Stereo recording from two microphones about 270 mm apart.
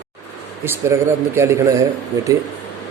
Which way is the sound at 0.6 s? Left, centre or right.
Centre.